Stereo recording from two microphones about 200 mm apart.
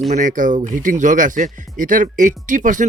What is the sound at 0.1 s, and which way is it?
Speech, 40° right (ahead or behind).